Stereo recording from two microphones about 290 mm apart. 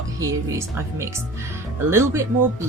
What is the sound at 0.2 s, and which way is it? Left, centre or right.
Speech, centre.